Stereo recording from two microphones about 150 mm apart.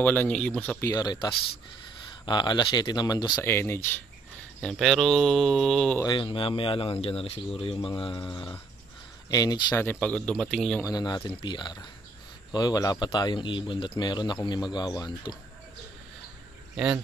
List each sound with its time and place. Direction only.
0.0 s speech: 10° left (ahead or behind); by 3.3 s 25° left (ahead or behind)
3.3 s speech: 15° left (ahead or behind)
4.6 s speech: centre (ahead or behind)
6.0 s speech: 35° left (ahead or behind)
9.8 s speech: 10° left (ahead or behind)
10.8 s speech: 25° left (ahead or behind)
16.7 s speech: 5° right (ahead or behind)